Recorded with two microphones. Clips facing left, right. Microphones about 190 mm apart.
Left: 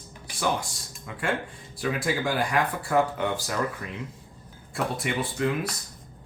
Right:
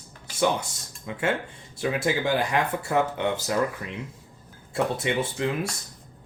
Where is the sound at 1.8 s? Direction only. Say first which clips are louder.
Right 2 dB; 25° right (ahead or behind).